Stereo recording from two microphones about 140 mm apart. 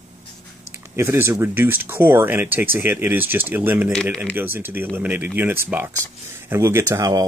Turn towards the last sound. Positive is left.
turn(degrees=-25)  # may be behind; listen again after turning